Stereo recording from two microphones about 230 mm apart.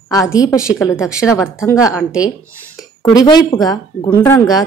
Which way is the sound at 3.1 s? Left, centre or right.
Centre.